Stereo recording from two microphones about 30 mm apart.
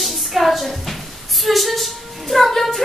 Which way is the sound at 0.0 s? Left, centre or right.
Centre.